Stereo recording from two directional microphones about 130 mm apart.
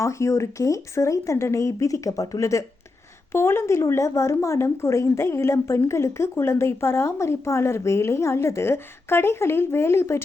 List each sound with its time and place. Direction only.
0.0 s speech: 25° left (ahead or behind)